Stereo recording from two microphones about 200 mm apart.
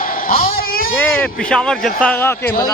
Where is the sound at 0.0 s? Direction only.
45° left (ahead or behind).